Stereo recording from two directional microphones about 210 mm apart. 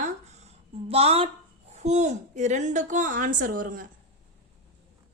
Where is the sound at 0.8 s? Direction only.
30° right (ahead or behind).